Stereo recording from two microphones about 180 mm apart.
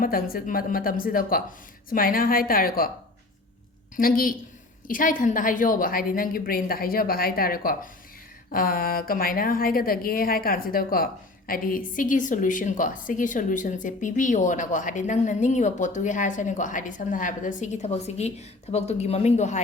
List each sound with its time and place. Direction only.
0.0 s a woman's voice: 50° left (ahead or behind)
3.9 s a woman's voice: 50° left (ahead or behind)